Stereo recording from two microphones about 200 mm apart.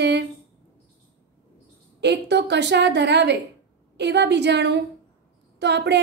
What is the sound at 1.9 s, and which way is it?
A woman's voice, 60° right (ahead or behind).